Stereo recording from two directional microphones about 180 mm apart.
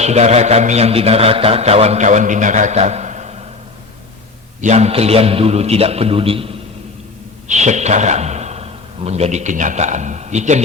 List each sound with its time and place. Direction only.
0.0 s a man's voice: 40° right (ahead or behind)
4.6 s a man's voice: 40° right (ahead or behind)